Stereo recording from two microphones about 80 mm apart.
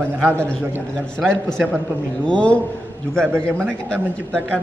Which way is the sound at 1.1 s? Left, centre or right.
Centre.